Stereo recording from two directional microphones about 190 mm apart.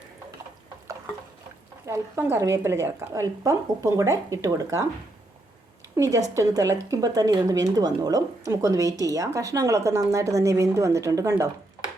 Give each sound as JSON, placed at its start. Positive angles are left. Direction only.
{"t": 1.9, "sound": "a woman's voice", "side_deg": -10}
{"t": 6.0, "sound": "a woman's voice", "side_deg": -20}